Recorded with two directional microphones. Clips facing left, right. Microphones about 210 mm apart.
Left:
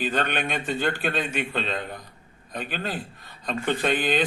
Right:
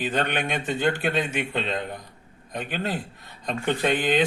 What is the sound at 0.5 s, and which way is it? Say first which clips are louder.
Speech: right 2 dB; 20° right (ahead or behind).